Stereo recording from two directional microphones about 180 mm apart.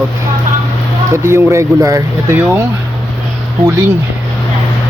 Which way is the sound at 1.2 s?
15° right (ahead or behind).